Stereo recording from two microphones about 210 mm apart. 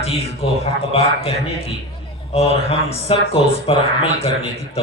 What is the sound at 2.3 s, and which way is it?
Speech, 30° left (ahead or behind).